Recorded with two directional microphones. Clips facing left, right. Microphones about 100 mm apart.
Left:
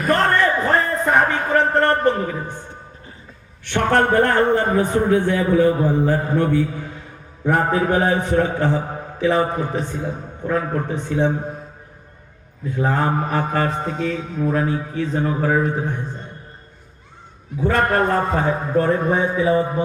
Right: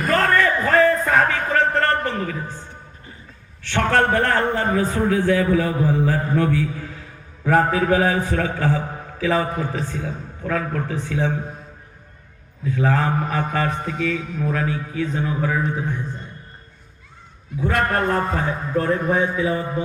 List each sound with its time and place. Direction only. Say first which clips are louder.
0.1 s a sound: left 1 dB; 25° left (ahead or behind)
3.6 s a man's voice: left 1 dB; 15° left (ahead or behind)
12.8 s a man's voice: left 1 dB; 30° left (ahead or behind)
17.7 s a man's voice: left 3 dB; 25° left (ahead or behind)